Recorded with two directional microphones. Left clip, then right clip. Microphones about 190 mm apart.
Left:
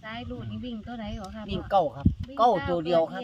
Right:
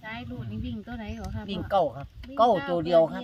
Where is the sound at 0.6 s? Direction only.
45° left (ahead or behind).